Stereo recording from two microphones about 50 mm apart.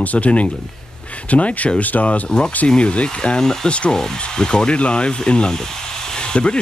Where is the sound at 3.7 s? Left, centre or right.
Left.